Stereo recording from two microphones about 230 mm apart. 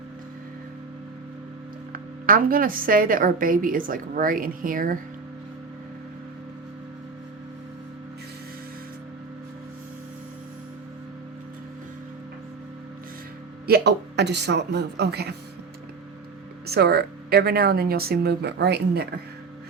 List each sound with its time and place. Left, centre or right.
1.9 s a woman's voice: right
13.7 s speech: right
16.6 s speech: right